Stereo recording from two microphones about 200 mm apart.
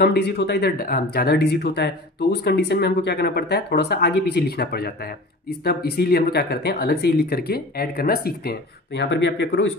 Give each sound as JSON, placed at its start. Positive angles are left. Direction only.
{"t": 0.0, "sound": "speech", "side_deg": 55}